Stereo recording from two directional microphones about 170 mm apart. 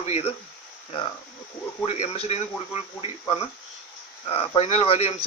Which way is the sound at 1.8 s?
40° left (ahead or behind).